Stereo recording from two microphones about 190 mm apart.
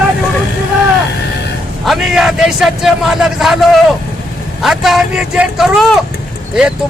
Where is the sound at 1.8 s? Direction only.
Centre (ahead or behind).